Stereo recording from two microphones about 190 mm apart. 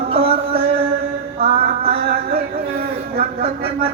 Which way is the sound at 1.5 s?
55° right (ahead or behind).